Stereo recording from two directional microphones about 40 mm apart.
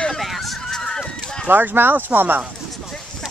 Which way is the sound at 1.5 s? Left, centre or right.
Right.